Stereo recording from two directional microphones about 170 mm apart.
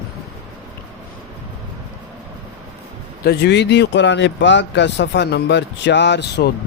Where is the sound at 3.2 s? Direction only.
75° left (ahead or behind).